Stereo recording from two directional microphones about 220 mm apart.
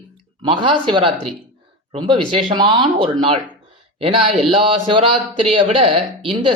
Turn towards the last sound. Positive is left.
turn(degrees=-25)  # may be behind; listen again after turning